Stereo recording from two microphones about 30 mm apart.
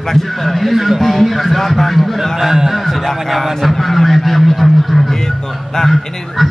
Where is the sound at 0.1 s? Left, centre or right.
Centre.